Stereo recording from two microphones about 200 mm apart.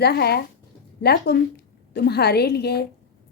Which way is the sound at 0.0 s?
55° left (ahead or behind).